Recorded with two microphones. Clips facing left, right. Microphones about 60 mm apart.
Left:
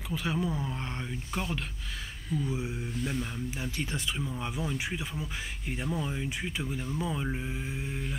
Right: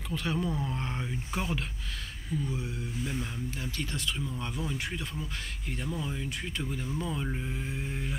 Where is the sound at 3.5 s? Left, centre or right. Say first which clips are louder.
Left 2 dB; centre.